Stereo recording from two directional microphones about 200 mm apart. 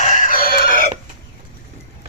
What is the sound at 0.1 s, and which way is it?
Chicken, 40° left (ahead or behind).